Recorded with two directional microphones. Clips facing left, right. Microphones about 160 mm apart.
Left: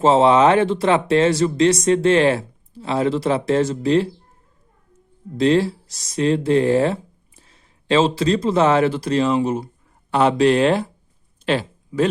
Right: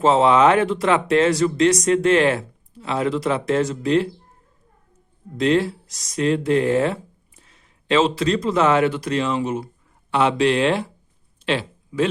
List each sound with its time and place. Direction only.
0.0 s speech: 30° left (ahead or behind)
5.4 s speech: 30° left (ahead or behind)
11.4 s a sound: 40° left (ahead or behind)